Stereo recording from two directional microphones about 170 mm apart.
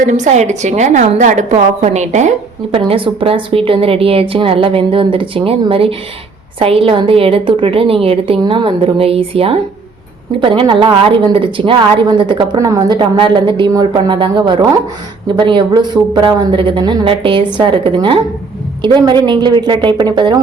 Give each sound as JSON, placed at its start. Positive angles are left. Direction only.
{"t": 0.0, "sound": "a woman's voice", "side_deg": -45}
{"t": 2.7, "sound": "a woman's voice", "side_deg": -35}